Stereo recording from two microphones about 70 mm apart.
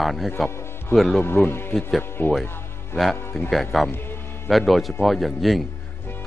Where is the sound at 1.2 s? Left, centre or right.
Left.